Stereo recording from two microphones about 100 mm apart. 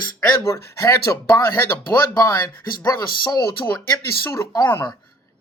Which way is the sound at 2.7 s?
45° left (ahead or behind).